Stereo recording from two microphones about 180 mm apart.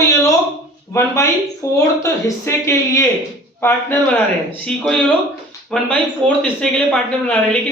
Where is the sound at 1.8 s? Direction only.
15° left (ahead or behind).